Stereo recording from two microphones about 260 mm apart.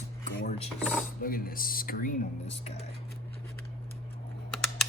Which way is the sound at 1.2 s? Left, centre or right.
Left.